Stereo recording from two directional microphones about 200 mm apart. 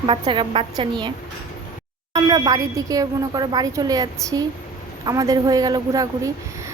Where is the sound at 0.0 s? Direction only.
25° right (ahead or behind).